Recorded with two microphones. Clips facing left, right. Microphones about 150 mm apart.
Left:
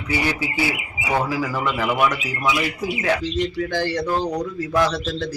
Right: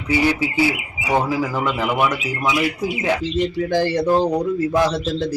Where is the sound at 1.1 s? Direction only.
25° right (ahead or behind).